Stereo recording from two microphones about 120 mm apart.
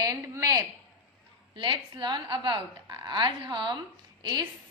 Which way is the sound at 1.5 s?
40° right (ahead or behind).